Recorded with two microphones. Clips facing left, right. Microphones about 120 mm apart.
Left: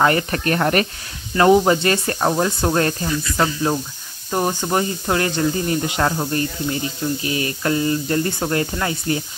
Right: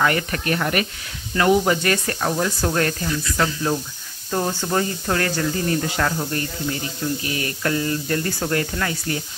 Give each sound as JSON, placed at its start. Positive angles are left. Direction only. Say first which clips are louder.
{"t": 0.0, "sound": "speech", "louder": "left 4 dB", "side_deg": 35}
{"t": 1.3, "sound": "speech", "louder": "left 4 dB", "side_deg": 30}
{"t": 4.3, "sound": "speech", "louder": "left 2 dB", "side_deg": 15}